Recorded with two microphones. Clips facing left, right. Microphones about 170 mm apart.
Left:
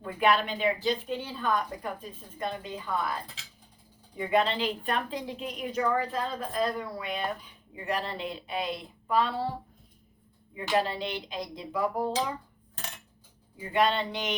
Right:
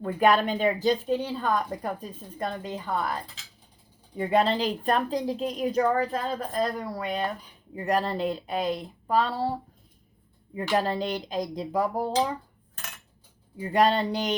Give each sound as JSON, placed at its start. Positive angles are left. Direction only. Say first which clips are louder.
{"t": 0.0, "sound": "a woman's voice", "louder": "right 4 dB", "side_deg": -40}
{"t": 4.2, "sound": "a woman's voice", "louder": "right 3 dB", "side_deg": -35}
{"t": 10.5, "sound": "a woman's voice", "louder": "right 2 dB", "side_deg": -40}
{"t": 13.6, "sound": "a woman's voice", "louder": "right 4 dB", "side_deg": -40}